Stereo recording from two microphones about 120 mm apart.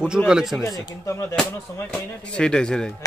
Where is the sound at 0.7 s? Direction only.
30° left (ahead or behind).